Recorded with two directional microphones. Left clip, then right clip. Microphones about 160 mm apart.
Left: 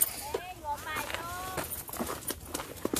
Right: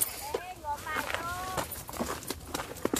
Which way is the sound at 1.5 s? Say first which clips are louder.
Right 2 dB; 10° left (ahead or behind).